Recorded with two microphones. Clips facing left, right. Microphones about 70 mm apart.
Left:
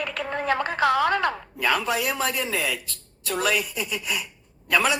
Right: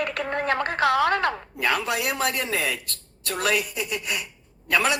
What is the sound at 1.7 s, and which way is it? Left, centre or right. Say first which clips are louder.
Speech: left 1 dB; centre.